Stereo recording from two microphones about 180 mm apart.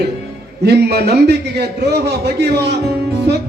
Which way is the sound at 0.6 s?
65° right (ahead or behind).